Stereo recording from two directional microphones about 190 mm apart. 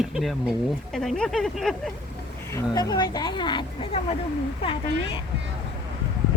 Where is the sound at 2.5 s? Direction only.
20° left (ahead or behind).